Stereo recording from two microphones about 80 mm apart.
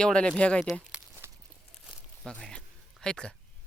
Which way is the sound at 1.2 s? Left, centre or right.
Right.